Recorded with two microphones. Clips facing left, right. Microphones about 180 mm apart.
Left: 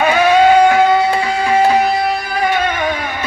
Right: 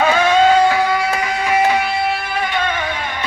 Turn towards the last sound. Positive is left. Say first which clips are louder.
# left 4 dB
turn(degrees=35)  # may be behind; listen again after turning